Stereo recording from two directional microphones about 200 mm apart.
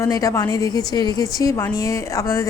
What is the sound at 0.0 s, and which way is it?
A woman's voice, 15° left (ahead or behind).